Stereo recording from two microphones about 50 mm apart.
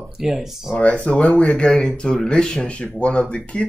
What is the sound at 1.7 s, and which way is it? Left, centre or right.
Speech, centre.